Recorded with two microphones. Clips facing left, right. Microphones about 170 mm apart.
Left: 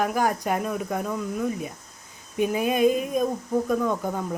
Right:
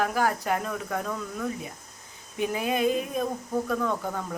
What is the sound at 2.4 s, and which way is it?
Speech, 20° left (ahead or behind).